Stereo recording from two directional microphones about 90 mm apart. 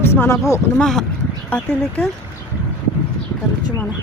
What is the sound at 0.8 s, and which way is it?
Speech, 5° left (ahead or behind).